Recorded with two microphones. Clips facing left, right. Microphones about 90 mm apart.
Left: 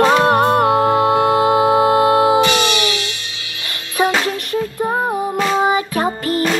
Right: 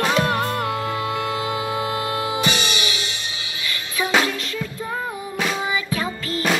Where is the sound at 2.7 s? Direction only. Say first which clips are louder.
Left 7 dB; 20° right (ahead or behind).